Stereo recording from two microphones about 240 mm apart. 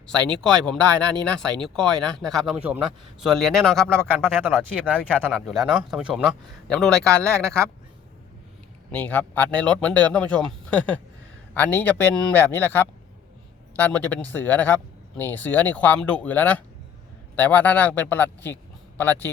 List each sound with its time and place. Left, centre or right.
0.1 s speech: centre
9.0 s speech: centre